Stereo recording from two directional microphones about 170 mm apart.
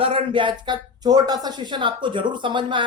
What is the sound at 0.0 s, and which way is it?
Speech, 35° right (ahead or behind).